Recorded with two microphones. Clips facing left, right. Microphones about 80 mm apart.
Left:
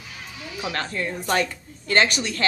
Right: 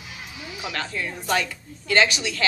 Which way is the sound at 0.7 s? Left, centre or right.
Left.